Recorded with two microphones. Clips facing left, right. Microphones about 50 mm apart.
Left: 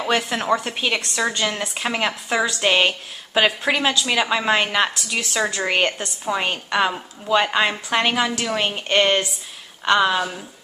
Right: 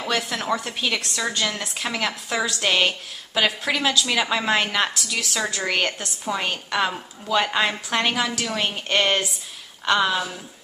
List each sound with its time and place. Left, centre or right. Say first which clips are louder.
0.0 s a woman's voice: left 4 dB; centre